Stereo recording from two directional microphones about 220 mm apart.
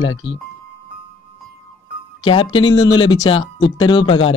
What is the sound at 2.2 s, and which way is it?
Speech, 25° left (ahead or behind).